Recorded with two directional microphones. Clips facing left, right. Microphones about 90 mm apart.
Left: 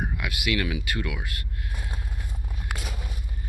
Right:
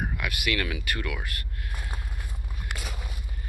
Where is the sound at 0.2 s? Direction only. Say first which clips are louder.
Left 2 dB; 20° left (ahead or behind).